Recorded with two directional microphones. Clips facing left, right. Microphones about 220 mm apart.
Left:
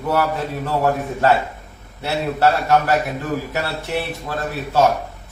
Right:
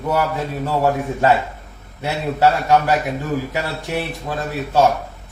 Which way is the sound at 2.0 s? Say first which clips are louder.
Right 1 dB; 15° right (ahead or behind).